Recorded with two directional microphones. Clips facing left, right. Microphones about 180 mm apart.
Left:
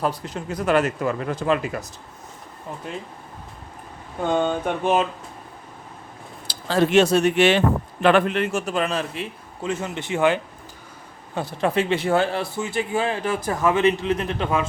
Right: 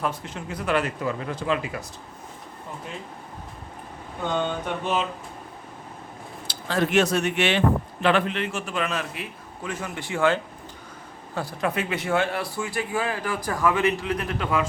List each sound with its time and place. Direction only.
0.0 s speech: 35° left (ahead or behind)
4.4 s speech: 50° left (ahead or behind)
6.5 s a man's voice: 30° left (ahead or behind)